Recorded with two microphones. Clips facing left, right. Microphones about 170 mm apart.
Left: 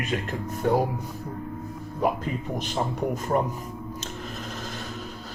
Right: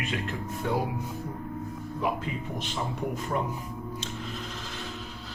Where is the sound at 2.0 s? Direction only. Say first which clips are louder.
Left 5 dB; 45° left (ahead or behind).